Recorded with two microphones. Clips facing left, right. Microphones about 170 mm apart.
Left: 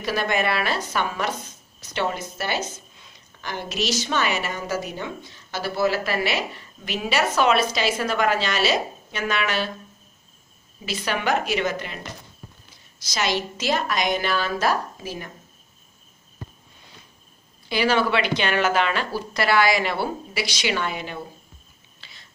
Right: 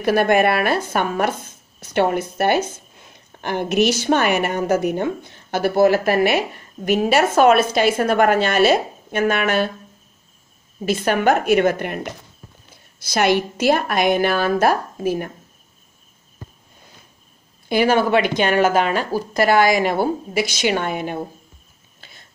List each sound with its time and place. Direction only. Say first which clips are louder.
0.0 s a woman's voice: right 8 dB; 55° right (ahead or behind)
10.9 s a woman's voice: right 7 dB; 50° right (ahead or behind)
17.6 s a woman's voice: right 5 dB; 50° right (ahead or behind)
22.0 s biting: right 4 dB; 50° right (ahead or behind)